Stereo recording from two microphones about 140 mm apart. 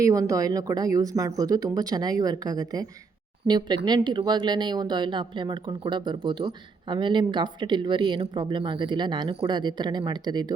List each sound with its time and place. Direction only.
0.0 s a woman's voice: 25° right (ahead or behind)